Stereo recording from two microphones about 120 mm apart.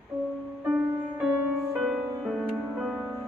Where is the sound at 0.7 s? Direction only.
15° right (ahead or behind).